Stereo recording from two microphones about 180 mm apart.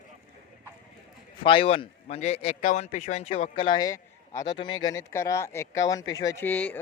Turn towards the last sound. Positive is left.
turn(degrees=10)  # may be behind; listen again after turning